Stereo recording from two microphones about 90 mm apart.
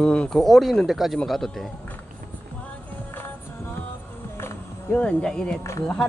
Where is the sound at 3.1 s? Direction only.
25° left (ahead or behind).